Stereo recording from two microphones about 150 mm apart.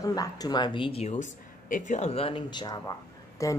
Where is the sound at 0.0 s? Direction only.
25° left (ahead or behind).